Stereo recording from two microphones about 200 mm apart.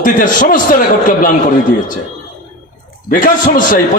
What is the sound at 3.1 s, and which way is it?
Speech, 40° left (ahead or behind).